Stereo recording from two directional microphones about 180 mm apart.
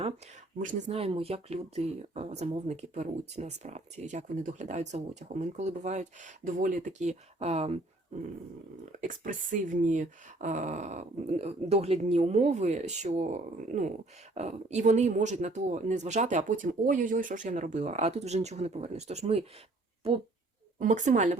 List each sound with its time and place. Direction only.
0.6 s speech: 45° right (ahead or behind)
9.0 s speech: 45° right (ahead or behind)
20.7 s a woman's voice: 45° right (ahead or behind)